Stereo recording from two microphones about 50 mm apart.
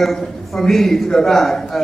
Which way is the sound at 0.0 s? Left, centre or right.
Centre.